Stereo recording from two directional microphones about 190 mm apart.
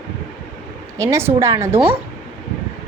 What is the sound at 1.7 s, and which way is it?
Speech, 30° right (ahead or behind).